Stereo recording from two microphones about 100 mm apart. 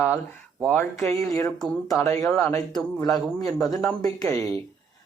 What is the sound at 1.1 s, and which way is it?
Speech, 30° left (ahead or behind).